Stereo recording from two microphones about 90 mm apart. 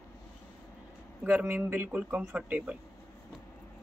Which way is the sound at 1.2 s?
20° right (ahead or behind).